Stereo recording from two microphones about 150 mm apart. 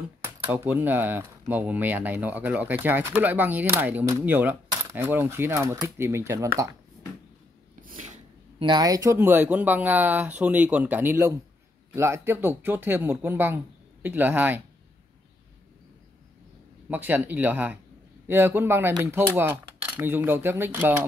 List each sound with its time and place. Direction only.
0.2 s speech: 10° right (ahead or behind)
7.8 s a sound: 55° right (ahead or behind)
8.5 s speech: 30° right (ahead or behind); by 14.6 s 10° right (ahead or behind)
16.9 s speech: 10° right (ahead or behind)